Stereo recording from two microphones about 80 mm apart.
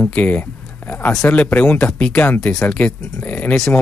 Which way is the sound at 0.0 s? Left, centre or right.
Left.